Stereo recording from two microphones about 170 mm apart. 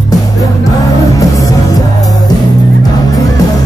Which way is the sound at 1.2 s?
20° left (ahead or behind).